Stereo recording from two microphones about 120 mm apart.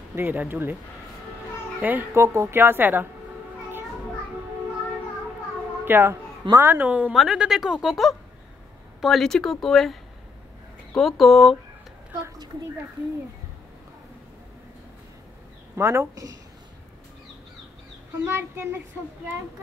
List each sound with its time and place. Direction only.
0.1 s speech: 15° right (ahead or behind)
1.8 s speech: 15° right (ahead or behind)
2.2 s a woman's voice: 25° right (ahead or behind)
5.9 s a woman's voice: 20° right (ahead or behind); by 11.5 s centre (ahead or behind)
15.7 s a woman's voice: 20° right (ahead or behind)
18.2 s a woman's voice: 20° right (ahead or behind)